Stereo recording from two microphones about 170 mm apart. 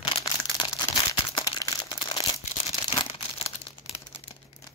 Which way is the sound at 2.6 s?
35° left (ahead or behind).